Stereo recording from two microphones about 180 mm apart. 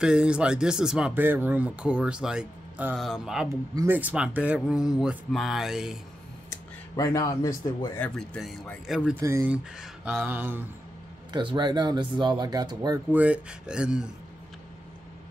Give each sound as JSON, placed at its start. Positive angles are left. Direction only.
{"t": 0.0, "sound": "speech", "side_deg": -5}
{"t": 3.4, "sound": "speech", "side_deg": -15}
{"t": 6.5, "sound": "speech", "side_deg": 20}
{"t": 8.2, "sound": "speech", "side_deg": 0}
{"t": 9.2, "sound": "a sound", "side_deg": -15}
{"t": 9.8, "sound": "a sound", "side_deg": -5}
{"t": 11.3, "sound": "speech", "side_deg": -25}
{"t": 13.1, "sound": "speech", "side_deg": -5}